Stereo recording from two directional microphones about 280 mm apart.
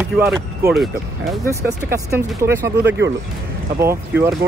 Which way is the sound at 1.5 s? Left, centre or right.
Centre.